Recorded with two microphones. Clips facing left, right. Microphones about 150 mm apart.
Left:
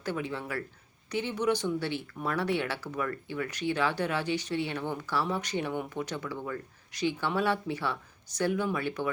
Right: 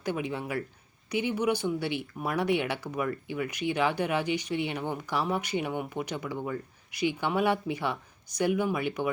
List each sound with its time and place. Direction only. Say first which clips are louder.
0.0 s speech: right 2 dB; 15° right (ahead or behind)